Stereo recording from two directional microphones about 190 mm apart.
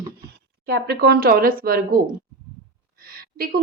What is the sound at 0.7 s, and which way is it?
A woman's voice, 55° right (ahead or behind).